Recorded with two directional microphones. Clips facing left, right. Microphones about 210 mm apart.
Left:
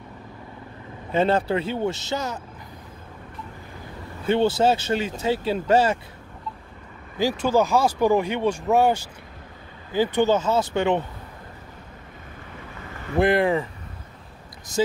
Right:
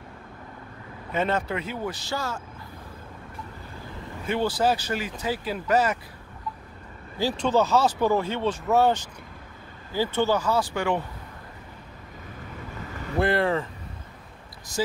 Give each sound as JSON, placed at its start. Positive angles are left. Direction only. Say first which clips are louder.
{"t": 1.1, "sound": "speech", "louder": "left 5 dB", "side_deg": 30}
{"t": 4.3, "sound": "speech", "louder": "left 5 dB", "side_deg": 25}
{"t": 7.2, "sound": "speech", "louder": "left 2 dB", "side_deg": 10}
{"t": 13.2, "sound": "speech", "louder": "left 4 dB", "side_deg": 15}